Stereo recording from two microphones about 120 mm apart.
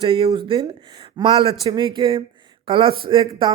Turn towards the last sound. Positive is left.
turn(degrees=-45)  # may be behind; listen again after turning